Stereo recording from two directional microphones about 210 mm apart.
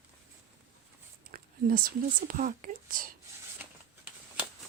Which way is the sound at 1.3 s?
45° right (ahead or behind).